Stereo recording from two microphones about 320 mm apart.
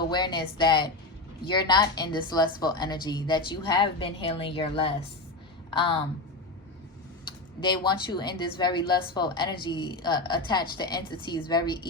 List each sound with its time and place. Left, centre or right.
0.0 s speech: centre
7.6 s speech: centre